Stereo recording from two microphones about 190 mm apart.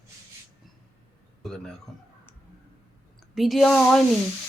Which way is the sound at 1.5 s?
5° left (ahead or behind).